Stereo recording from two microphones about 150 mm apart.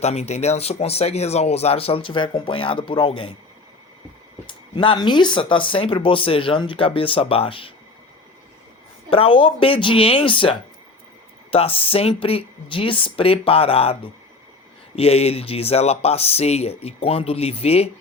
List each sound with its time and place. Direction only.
0.0 s speech: 45° left (ahead or behind)
4.4 s speech: 35° left (ahead or behind)
9.0 s speech: 35° left (ahead or behind)